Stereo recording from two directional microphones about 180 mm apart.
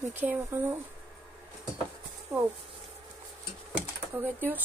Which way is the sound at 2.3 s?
15° right (ahead or behind).